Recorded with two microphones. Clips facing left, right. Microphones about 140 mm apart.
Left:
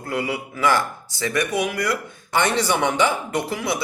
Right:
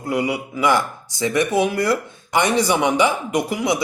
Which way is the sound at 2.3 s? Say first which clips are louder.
Right 3 dB; 15° right (ahead or behind).